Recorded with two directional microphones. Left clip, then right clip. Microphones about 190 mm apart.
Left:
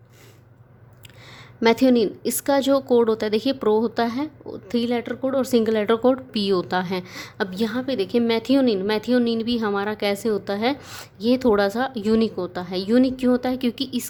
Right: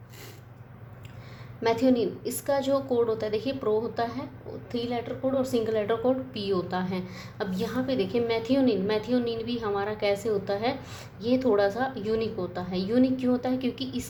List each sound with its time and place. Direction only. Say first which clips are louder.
1.6 s a woman's voice: left 6 dB; 55° left (ahead or behind)